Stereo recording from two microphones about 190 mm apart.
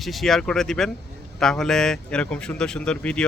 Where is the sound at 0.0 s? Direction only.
Centre (ahead or behind).